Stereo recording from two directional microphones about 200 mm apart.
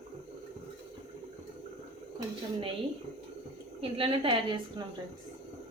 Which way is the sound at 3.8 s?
25° right (ahead or behind).